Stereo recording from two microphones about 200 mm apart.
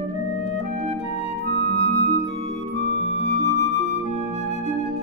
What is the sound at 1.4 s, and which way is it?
Music, 50° right (ahead or behind).